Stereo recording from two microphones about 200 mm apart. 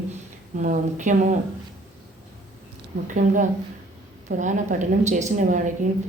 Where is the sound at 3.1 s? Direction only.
40° right (ahead or behind).